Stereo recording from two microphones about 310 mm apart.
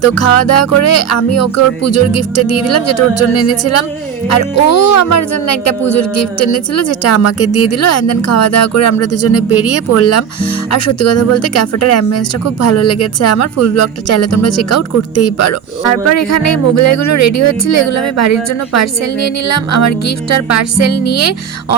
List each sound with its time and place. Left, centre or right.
0.0 s a woman's voice: left